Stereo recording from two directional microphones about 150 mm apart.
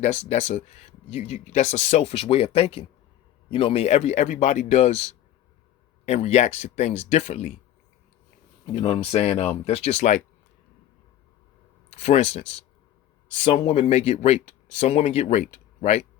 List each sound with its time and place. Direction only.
0.0 s speech: 50° left (ahead or behind)
8.6 s speech: 35° left (ahead or behind)
11.9 s speech: 50° left (ahead or behind)